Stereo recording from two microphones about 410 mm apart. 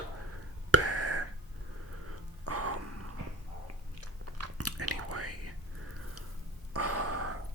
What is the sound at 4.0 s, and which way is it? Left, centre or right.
Chewing, right.